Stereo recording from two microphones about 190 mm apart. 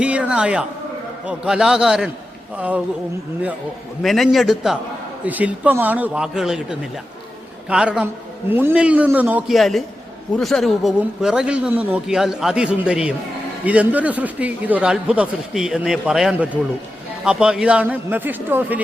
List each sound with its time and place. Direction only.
0.0 s speech: 5° right (ahead or behind)
4.0 s speech: centre (ahead or behind)